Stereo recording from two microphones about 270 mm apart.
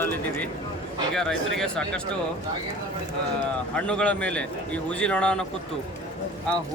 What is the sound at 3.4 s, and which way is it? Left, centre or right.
Speech, centre.